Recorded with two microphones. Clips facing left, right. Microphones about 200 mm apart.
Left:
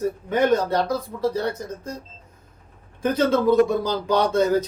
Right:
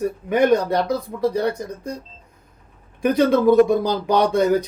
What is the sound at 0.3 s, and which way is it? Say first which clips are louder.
Speech: right 3 dB; 15° right (ahead or behind).